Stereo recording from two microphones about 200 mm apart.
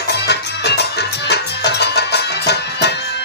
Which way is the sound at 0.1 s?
55° left (ahead or behind).